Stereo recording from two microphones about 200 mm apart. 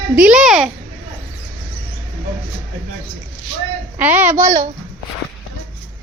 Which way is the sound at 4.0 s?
10° right (ahead or behind).